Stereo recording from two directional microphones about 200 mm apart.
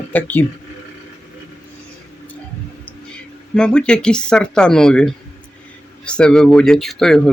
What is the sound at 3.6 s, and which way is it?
Speech, 5° left (ahead or behind).